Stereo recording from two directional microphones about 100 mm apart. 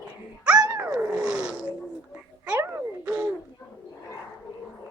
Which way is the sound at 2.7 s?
20° right (ahead or behind).